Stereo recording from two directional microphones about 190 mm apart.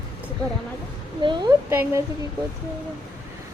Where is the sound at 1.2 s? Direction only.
25° right (ahead or behind).